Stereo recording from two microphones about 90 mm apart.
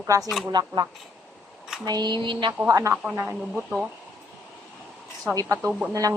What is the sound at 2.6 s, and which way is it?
Speech, 40° right (ahead or behind).